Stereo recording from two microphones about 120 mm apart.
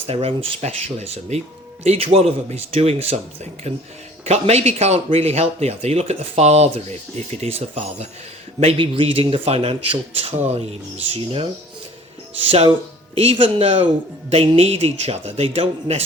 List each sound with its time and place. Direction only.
0.1 s speech: 50° right (ahead or behind)
8.6 s speech: 45° right (ahead or behind)
12.5 s speech: 50° right (ahead or behind)